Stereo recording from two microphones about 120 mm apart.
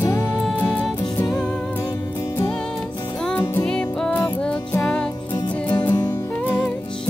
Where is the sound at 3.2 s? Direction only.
10° left (ahead or behind).